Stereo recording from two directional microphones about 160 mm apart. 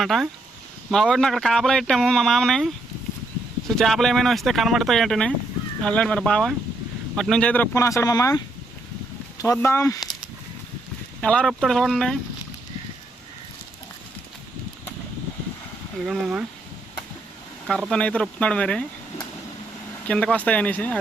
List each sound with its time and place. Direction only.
0.0 s speech: centre (ahead or behind); by 8.4 s 20° left (ahead or behind)
9.4 s speech: 20° left (ahead or behind)
11.2 s speech: 5° left (ahead or behind)
16.0 s speech: 5° right (ahead or behind)
17.7 s speech: 5° left (ahead or behind)
20.1 s speech: 5° left (ahead or behind)